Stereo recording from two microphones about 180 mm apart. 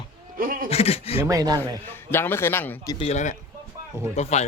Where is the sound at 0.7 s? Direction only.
35° left (ahead or behind).